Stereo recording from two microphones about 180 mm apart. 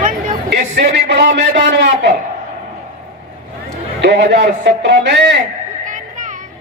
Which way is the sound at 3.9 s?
70° right (ahead or behind).